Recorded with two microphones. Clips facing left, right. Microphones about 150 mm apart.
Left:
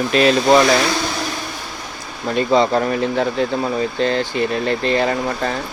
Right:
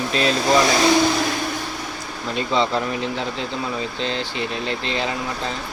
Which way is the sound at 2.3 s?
50° left (ahead or behind).